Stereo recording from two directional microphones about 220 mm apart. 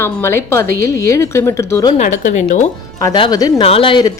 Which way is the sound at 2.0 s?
35° left (ahead or behind).